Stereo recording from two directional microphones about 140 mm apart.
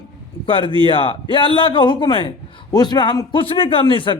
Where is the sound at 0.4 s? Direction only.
40° left (ahead or behind).